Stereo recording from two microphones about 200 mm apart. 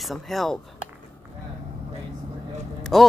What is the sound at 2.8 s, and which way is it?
Vehicle, centre (ahead or behind).